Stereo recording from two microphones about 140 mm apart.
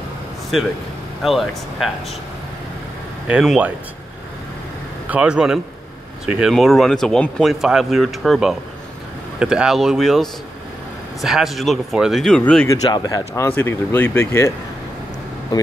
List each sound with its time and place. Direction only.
1.2 s speech: centre (ahead or behind)
3.3 s speech: 10° right (ahead or behind)
5.1 s speech: 5° right (ahead or behind)
12.6 s speech: 25° left (ahead or behind)